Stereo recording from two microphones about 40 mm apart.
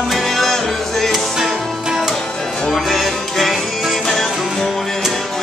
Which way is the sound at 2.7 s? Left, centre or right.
Centre.